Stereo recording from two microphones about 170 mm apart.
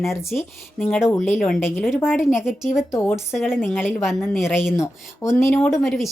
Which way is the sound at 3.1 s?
Centre (ahead or behind).